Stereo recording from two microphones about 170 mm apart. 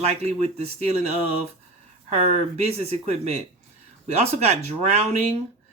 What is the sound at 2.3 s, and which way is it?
Speech, 40° right (ahead or behind).